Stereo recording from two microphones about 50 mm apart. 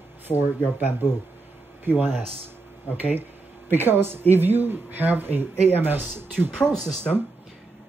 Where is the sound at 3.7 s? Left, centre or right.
Right.